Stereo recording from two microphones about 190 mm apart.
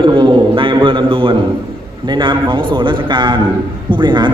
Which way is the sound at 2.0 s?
25° right (ahead or behind).